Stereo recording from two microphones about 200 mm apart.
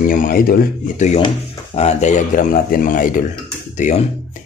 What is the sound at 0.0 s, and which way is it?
Speech, 45° left (ahead or behind).